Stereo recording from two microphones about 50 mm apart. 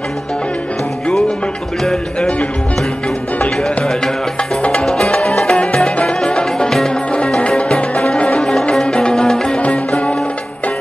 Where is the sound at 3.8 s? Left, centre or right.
Centre.